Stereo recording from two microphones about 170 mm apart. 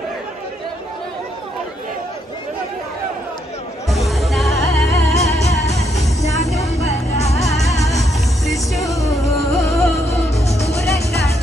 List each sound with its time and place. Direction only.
3.9 s music: centre (ahead or behind)
4.6 s music: 20° left (ahead or behind)
5.7 s music: 40° left (ahead or behind)
8.7 s music: 20° left (ahead or behind)
10.0 s music: 40° left (ahead or behind)
10.8 s music: 20° left (ahead or behind)